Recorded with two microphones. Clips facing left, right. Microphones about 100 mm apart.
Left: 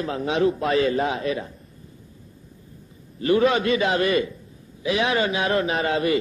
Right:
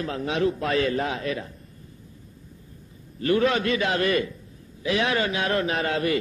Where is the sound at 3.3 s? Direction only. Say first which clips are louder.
Left 3 dB; 20° left (ahead or behind).